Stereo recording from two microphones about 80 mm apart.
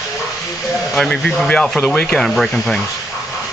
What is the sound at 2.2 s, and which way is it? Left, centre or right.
Speech, centre.